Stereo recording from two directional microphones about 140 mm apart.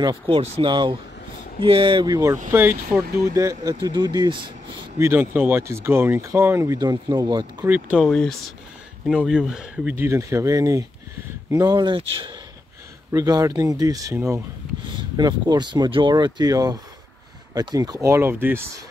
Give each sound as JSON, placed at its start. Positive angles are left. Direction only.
{"t": 0.0, "sound": "speech", "side_deg": -40}
{"t": 4.9, "sound": "speech", "side_deg": -15}
{"t": 6.8, "sound": "speech", "side_deg": -30}
{"t": 7.6, "sound": "speech", "side_deg": -15}
{"t": 8.0, "sound": "speech", "side_deg": 5}
{"t": 9.9, "sound": "speech", "side_deg": -20}
{"t": 13.1, "sound": "speech", "side_deg": -25}
{"t": 15.0, "sound": "speech", "side_deg": -30}